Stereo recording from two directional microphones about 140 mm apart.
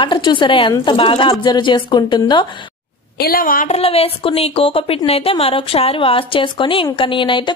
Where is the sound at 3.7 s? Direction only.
45° left (ahead or behind).